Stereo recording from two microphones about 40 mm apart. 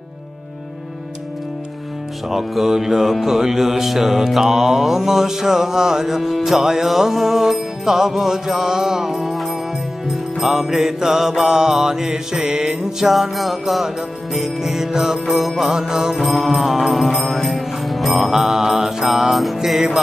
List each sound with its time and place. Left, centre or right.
2.2 s music: centre
13.1 s music: centre
15.7 s music: centre
16.2 s music: centre